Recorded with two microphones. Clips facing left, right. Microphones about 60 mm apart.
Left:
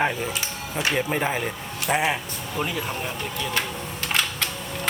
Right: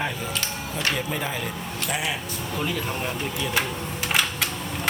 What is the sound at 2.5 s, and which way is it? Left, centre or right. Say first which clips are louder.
Speech: left 1 dB; centre.